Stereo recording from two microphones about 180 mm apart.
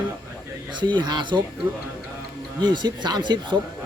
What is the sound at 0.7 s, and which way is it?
Speech, 25° right (ahead or behind).